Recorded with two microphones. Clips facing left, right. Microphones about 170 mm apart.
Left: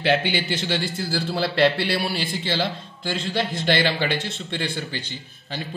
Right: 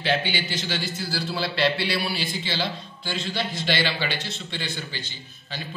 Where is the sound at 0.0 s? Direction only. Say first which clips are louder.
Left 4 dB; 65° left (ahead or behind).